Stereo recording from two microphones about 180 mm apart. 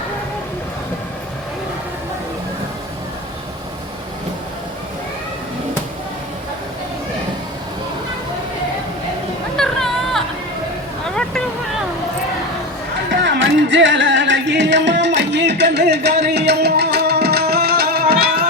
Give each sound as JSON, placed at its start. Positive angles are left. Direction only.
{"t": 9.6, "sound": "music", "side_deg": 0}
{"t": 11.1, "sound": "vehicle", "side_deg": 5}
{"t": 13.2, "sound": "music", "side_deg": -85}